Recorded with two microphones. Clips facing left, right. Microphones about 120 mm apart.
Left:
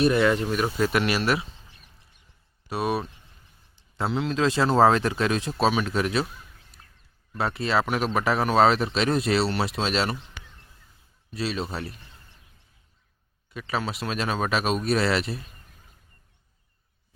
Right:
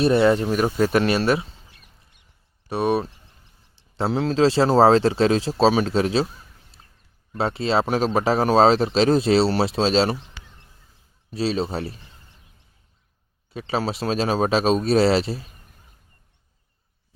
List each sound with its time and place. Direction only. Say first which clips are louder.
0.0 s speech: right 4 dB; 30° right (ahead or behind)
2.6 s speech: right 5 dB; 30° right (ahead or behind)
11.3 s speech: right 6 dB; 30° right (ahead or behind)
13.5 s speech: right 4 dB; 30° right (ahead or behind)